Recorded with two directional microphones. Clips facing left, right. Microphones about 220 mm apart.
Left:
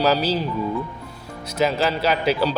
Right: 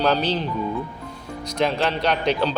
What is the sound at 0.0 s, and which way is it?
Speech, 5° left (ahead or behind).